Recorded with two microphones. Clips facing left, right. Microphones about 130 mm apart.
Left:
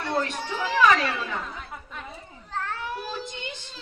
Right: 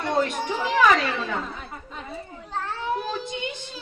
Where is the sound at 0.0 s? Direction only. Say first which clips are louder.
Right 4 dB; 15° right (ahead or behind).